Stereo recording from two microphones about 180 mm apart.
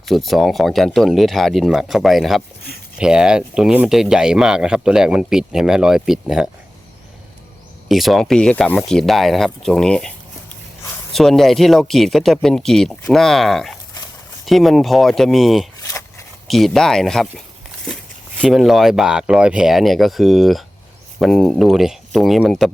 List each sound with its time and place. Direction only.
0.0 s speech: centre (ahead or behind)
7.9 s speech: centre (ahead or behind)
11.1 s speech: centre (ahead or behind)
15.8 s a sound: 15° left (ahead or behind)
16.5 s speech: centre (ahead or behind)
18.4 s speech: centre (ahead or behind)